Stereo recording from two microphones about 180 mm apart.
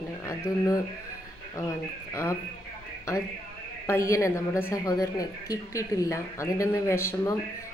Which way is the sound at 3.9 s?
15° left (ahead or behind).